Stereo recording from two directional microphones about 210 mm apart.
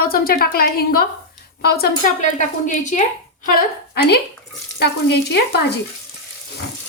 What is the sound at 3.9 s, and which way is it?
Speech, 50° left (ahead or behind).